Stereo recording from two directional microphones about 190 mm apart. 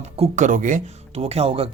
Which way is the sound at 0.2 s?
40° right (ahead or behind).